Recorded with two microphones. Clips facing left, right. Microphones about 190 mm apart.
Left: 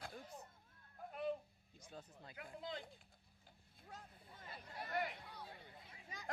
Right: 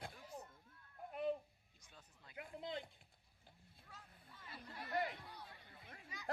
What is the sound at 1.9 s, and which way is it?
Speech, 40° left (ahead or behind).